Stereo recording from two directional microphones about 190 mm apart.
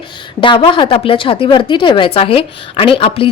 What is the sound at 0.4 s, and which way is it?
A woman's voice, 25° left (ahead or behind).